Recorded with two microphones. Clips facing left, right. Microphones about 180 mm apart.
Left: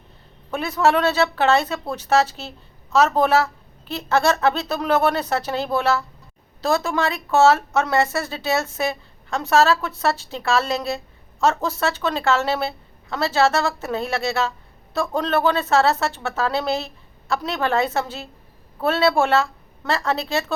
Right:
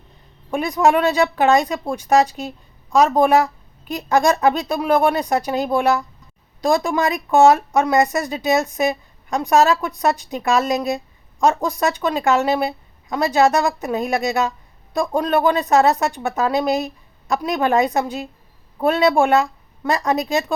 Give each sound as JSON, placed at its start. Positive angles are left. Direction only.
{"t": 0.5, "sound": "a woman's voice", "side_deg": -15}